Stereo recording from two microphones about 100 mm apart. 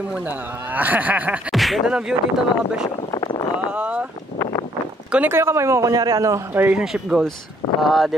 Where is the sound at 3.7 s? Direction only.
10° right (ahead or behind).